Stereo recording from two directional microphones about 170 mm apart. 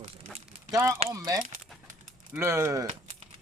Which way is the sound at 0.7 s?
15° right (ahead or behind).